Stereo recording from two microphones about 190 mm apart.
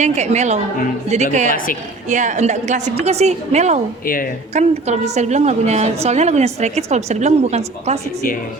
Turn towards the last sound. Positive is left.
turn(degrees=-35)  # may be behind; listen again after turning